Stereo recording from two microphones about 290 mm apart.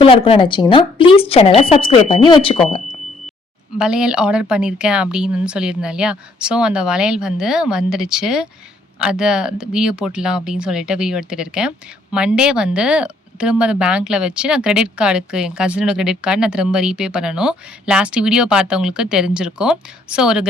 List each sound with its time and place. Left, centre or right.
0.0 s speech: centre
3.8 s speech: centre